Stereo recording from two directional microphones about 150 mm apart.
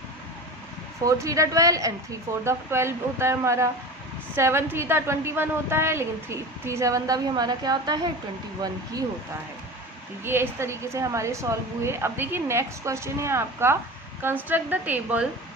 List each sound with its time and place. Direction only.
1.0 s a woman's voice: 20° right (ahead or behind)
10.2 s a woman's voice: 15° right (ahead or behind)